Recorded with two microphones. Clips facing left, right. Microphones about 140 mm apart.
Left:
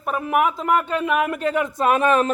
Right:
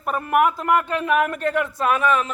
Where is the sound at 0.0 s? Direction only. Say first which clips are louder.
Right 1 dB; centre (ahead or behind); by 2.0 s 20° left (ahead or behind).